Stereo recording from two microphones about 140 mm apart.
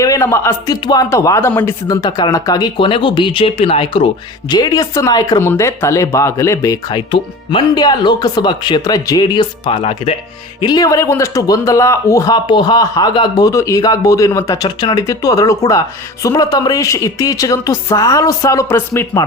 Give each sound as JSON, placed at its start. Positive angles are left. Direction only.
{"t": 0.0, "sound": "a man's voice", "side_deg": 20}
{"t": 2.0, "sound": "speech", "side_deg": 30}
{"t": 4.4, "sound": "a man's voice", "side_deg": 30}
{"t": 10.6, "sound": "a man's voice", "side_deg": 30}